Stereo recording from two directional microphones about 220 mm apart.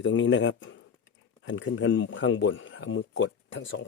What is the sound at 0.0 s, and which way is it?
Speech, 55° left (ahead or behind).